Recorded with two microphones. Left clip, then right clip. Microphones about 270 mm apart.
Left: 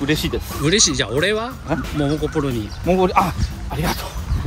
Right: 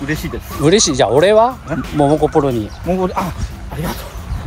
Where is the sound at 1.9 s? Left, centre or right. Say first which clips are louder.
Right 11 dB; right.